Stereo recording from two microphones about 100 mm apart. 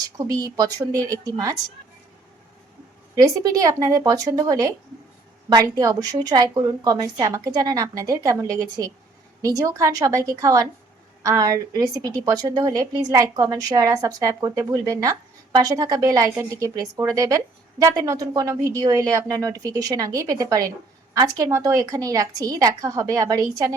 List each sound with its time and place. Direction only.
0.0 s a woman's voice: 35° right (ahead or behind)
3.2 s a woman's voice: 35° right (ahead or behind)